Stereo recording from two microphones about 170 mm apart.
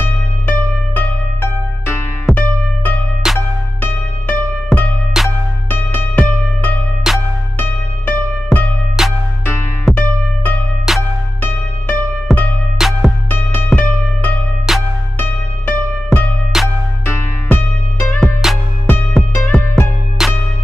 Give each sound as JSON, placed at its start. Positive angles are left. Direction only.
{"t": 0.5, "sound": "music", "side_deg": 10}
{"t": 5.2, "sound": "music", "side_deg": 0}
{"t": 5.7, "sound": "music", "side_deg": 10}
{"t": 7.0, "sound": "music", "side_deg": -5}
{"t": 7.5, "sound": "music", "side_deg": 10}
{"t": 9.0, "sound": "music", "side_deg": -5}
{"t": 9.8, "sound": "music", "side_deg": 10}
{"t": 10.9, "sound": "music", "side_deg": 0}
{"t": 12.3, "sound": "music", "side_deg": 0}
{"t": 14.7, "sound": "music", "side_deg": 0}
{"t": 16.1, "sound": "music", "side_deg": 5}
{"t": 17.0, "sound": "music", "side_deg": 10}